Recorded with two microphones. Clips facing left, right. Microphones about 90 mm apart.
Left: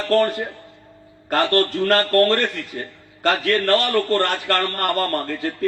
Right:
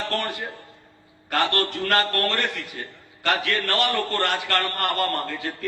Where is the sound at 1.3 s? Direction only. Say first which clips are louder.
Left 5 dB; 35° left (ahead or behind).